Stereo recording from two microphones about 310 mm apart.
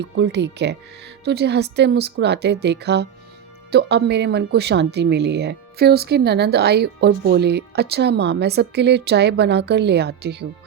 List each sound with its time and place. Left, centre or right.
0.0 s speech: right